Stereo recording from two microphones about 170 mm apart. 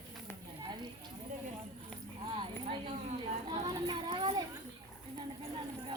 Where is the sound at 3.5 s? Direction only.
25° right (ahead or behind).